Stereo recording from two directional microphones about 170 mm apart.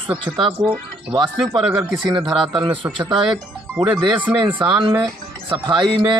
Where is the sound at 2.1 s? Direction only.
30° right (ahead or behind).